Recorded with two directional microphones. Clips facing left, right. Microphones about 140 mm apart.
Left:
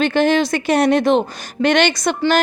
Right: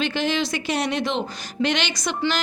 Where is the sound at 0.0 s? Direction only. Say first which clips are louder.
Left 8 dB; 50° left (ahead or behind).